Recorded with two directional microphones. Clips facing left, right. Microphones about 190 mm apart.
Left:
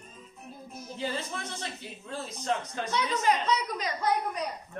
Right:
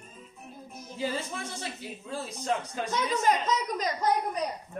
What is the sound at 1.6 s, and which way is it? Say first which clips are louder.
Speech: right 2 dB; 10° right (ahead or behind).